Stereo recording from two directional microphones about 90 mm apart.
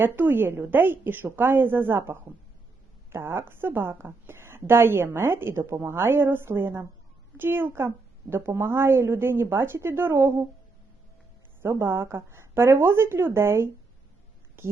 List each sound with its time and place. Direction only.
0.0 s a woman's voice: 25° right (ahead or behind)
11.6 s a woman's voice: 25° right (ahead or behind)